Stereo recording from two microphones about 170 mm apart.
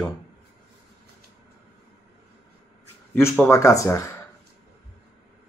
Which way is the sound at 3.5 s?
20° left (ahead or behind).